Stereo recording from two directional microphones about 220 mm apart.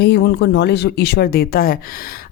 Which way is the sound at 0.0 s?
50° left (ahead or behind).